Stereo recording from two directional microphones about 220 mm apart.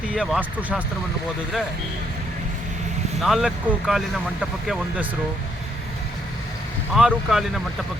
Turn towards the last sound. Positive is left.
turn(degrees=0)  # may be behind; listen again after turning